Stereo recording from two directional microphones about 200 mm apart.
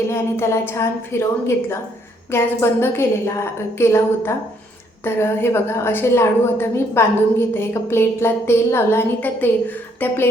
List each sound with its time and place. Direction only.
0.1 s a woman's voice: 15° left (ahead or behind)
2.3 s a woman's voice: 10° left (ahead or behind)